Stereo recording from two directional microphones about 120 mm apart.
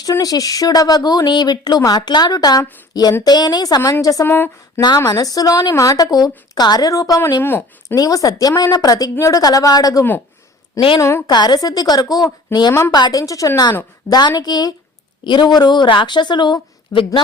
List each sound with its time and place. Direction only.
0.0 s speech: 30° left (ahead or behind)
4.3 s speech: 20° left (ahead or behind)
7.4 s speech: 20° left (ahead or behind)
7.9 s speech: 30° left (ahead or behind)
10.8 s a woman's voice: 45° left (ahead or behind)